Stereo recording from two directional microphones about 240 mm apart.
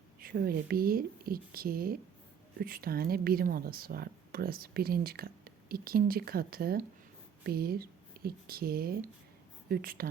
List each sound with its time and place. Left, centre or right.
0.2 s speech: right